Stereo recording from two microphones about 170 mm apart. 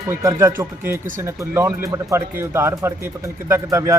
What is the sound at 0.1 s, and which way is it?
Speech, 15° right (ahead or behind).